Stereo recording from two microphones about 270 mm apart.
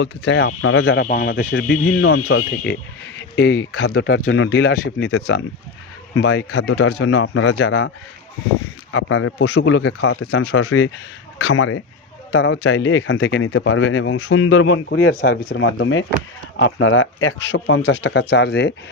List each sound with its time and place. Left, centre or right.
0.0 s speech: left
1.0 s speech: left
3.2 s speech: left